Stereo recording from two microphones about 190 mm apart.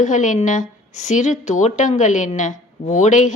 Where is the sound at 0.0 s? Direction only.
40° left (ahead or behind).